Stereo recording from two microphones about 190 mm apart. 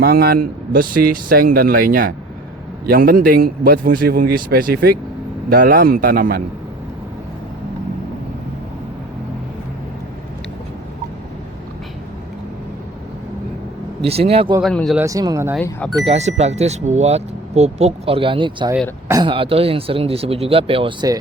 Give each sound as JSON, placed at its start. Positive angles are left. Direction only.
{"t": 0.0, "sound": "speech", "side_deg": -55}
{"t": 14.0, "sound": "speech", "side_deg": -30}
{"t": 14.6, "sound": "speech", "side_deg": 0}
{"t": 14.9, "sound": "speech", "side_deg": -15}
{"t": 16.0, "sound": "speech", "side_deg": -35}
{"t": 19.3, "sound": "speech", "side_deg": -30}